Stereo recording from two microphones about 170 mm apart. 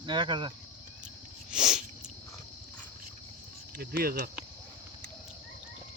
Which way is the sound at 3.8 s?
60° right (ahead or behind).